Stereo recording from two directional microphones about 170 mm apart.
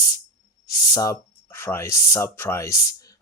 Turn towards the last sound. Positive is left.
turn(degrees=20)  # may be behind; listen again after turning